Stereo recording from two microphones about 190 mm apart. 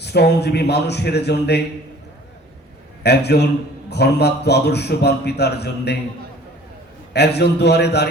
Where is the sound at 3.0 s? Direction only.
60° left (ahead or behind).